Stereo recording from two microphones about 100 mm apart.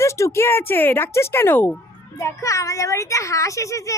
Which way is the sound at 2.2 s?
35° left (ahead or behind).